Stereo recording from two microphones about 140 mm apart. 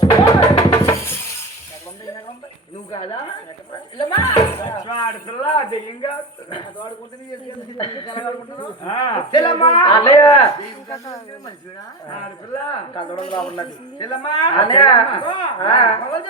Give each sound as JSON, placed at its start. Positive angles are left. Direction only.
{"t": 0.0, "sound": "music", "side_deg": 30}
{"t": 2.9, "sound": "a sound", "side_deg": 35}
{"t": 7.8, "sound": "a man's voice", "side_deg": 35}
{"t": 12.6, "sound": "a man's voice", "side_deg": 35}